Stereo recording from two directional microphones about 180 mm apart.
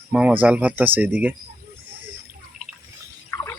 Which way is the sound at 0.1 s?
5° right (ahead or behind).